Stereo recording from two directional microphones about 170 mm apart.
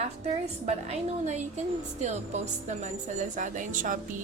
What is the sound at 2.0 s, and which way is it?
A woman's voice, 40° right (ahead or behind).